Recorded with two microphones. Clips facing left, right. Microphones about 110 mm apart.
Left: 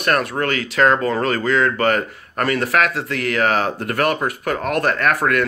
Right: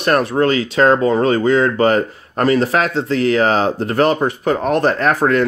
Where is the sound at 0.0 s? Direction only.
30° right (ahead or behind).